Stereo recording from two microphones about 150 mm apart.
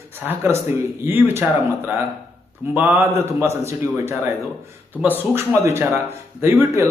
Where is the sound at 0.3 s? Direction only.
20° right (ahead or behind).